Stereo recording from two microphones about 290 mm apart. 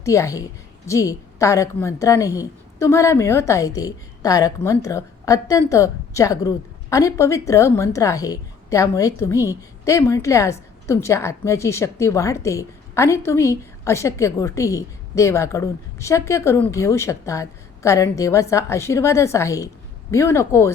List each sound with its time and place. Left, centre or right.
0.0 s a woman's voice: centre